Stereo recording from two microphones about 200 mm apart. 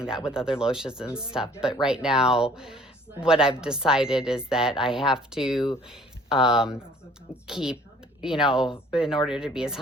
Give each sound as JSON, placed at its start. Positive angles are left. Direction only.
{"t": 0.3, "sound": "speech", "side_deg": -5}